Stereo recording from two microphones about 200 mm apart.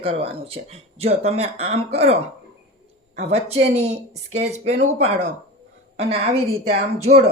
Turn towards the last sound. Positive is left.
turn(degrees=-30)  # may be behind; listen again after turning